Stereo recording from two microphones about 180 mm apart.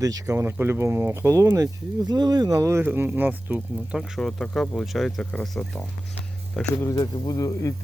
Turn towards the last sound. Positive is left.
turn(degrees=20)  # may be behind; listen again after turning